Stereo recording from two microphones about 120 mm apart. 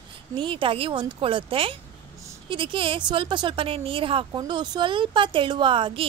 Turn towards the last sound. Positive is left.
turn(degrees=-40)  # may be behind; listen again after turning